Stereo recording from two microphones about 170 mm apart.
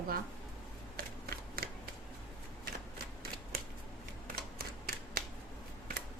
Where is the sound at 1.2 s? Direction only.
65° right (ahead or behind).